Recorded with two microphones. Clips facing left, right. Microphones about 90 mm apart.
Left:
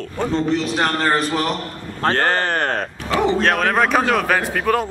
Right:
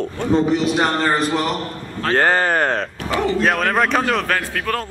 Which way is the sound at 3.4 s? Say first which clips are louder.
Even; centre (ahead or behind).